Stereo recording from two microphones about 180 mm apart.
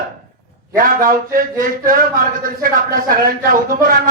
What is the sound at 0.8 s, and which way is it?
Speech, 50° right (ahead or behind).